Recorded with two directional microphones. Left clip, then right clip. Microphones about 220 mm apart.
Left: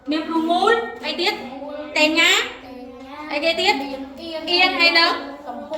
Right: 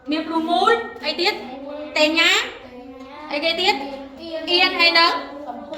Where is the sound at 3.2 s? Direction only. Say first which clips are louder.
Left 1 dB; 5° right (ahead or behind).